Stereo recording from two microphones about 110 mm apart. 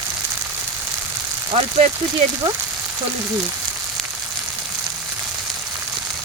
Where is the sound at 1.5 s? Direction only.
70° right (ahead or behind).